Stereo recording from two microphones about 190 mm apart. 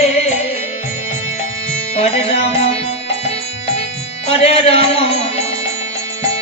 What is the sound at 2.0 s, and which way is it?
Music, 30° left (ahead or behind).